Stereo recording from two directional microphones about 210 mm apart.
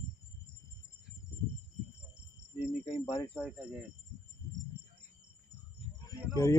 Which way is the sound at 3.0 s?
15° left (ahead or behind).